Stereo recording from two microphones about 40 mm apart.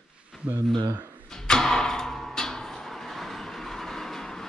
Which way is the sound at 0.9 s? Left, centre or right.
Right.